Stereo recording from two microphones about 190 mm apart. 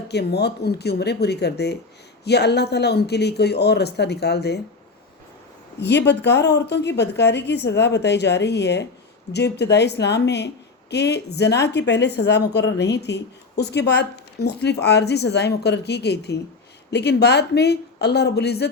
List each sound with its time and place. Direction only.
0.1 s speech: 60° left (ahead or behind)
5.8 s speech: 65° left (ahead or behind)